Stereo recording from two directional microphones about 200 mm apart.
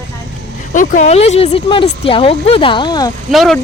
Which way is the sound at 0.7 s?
40° left (ahead or behind).